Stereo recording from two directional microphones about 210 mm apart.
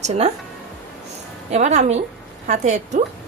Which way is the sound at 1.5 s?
35° right (ahead or behind).